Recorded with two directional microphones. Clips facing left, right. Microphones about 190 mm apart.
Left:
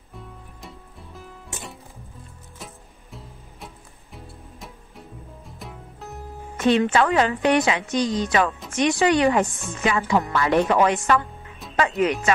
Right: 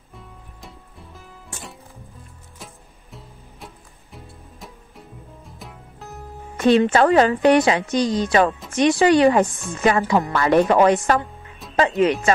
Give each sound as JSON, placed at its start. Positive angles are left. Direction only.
{"t": 0.1, "sound": "music", "side_deg": 0}
{"t": 2.6, "sound": "music", "side_deg": 0}
{"t": 6.5, "sound": "music", "side_deg": -35}
{"t": 6.9, "sound": "speech", "side_deg": -40}
{"t": 9.5, "sound": "speech", "side_deg": 0}
{"t": 9.9, "sound": "speech", "side_deg": -40}
{"t": 11.6, "sound": "music", "side_deg": 0}
{"t": 12.0, "sound": "speech", "side_deg": -35}